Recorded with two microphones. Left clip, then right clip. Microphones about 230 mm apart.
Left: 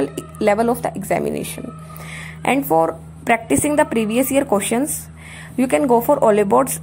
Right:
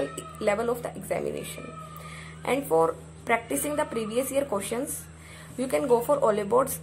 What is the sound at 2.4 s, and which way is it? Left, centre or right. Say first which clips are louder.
A woman's voice: left 7 dB; left.